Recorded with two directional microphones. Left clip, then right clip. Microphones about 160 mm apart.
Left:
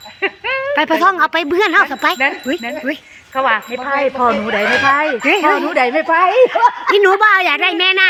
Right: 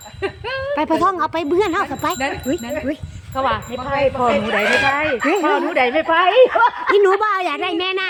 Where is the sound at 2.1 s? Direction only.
35° left (ahead or behind).